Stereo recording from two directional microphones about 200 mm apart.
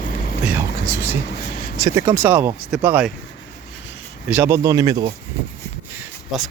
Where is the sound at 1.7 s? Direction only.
20° right (ahead or behind).